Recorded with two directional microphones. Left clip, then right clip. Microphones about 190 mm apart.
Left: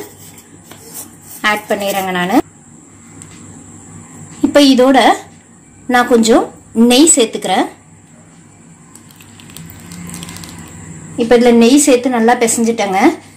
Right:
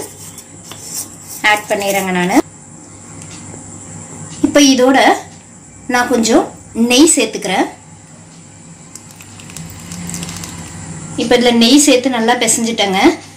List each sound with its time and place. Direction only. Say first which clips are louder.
1.4 s a woman's voice: right 2 dB; 40° left (ahead or behind)
4.4 s a woman's voice: left 1 dB; 35° left (ahead or behind)
11.2 s a woman's voice: left 2 dB; 35° left (ahead or behind)